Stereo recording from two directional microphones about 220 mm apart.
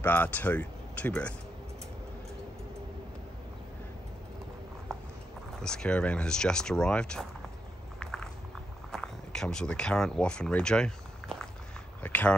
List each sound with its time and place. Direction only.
0.0 s speech: 10° left (ahead or behind)
4.9 s clip-clop: centre (ahead or behind)
5.6 s speech: 5° left (ahead or behind)
8.0 s a sound: centre (ahead or behind)
8.9 s speech: centre (ahead or behind)